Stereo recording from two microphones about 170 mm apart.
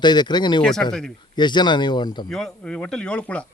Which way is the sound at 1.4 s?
25° left (ahead or behind).